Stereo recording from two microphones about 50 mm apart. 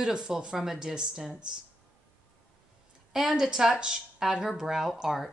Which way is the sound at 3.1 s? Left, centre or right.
Centre.